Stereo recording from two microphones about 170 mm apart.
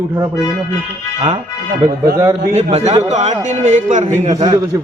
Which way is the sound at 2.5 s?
40° right (ahead or behind).